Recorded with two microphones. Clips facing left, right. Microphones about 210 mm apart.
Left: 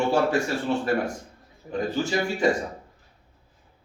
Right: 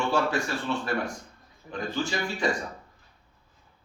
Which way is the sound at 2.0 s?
45° left (ahead or behind).